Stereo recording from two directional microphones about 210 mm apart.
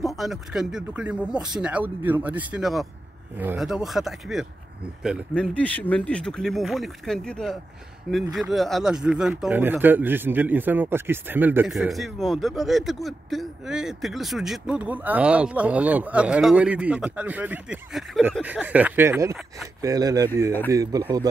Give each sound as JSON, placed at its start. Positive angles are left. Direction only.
{"t": 0.0, "sound": "speech", "side_deg": 0}